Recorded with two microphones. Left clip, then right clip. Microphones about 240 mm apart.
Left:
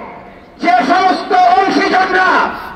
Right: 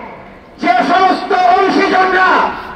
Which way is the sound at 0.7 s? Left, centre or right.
Left.